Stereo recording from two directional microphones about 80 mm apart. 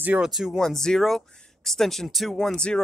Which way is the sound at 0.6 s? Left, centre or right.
Centre.